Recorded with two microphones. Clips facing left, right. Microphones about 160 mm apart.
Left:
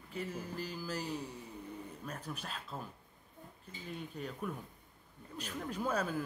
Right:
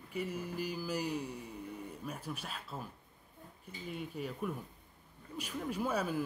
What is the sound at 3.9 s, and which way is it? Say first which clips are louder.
Speech: right 2 dB; 5° right (ahead or behind).